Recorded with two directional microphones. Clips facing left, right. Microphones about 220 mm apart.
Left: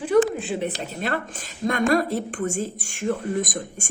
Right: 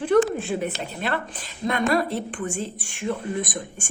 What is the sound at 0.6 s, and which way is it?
A woman's voice, 40° left (ahead or behind).